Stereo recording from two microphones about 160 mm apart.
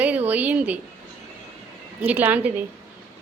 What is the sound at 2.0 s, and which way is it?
Speech, 10° right (ahead or behind).